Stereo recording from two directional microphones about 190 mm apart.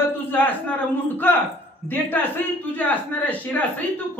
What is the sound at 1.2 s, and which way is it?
Speech, 10° left (ahead or behind).